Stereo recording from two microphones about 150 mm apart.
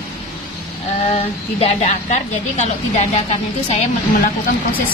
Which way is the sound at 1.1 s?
45° left (ahead or behind).